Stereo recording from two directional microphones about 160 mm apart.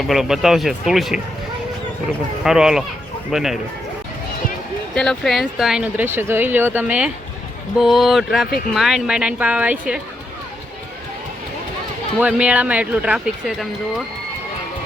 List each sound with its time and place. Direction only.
0.1 s speech: centre (ahead or behind)
2.4 s speech: 5° right (ahead or behind)
4.9 s speech: centre (ahead or behind)
12.2 s speech: 10° right (ahead or behind)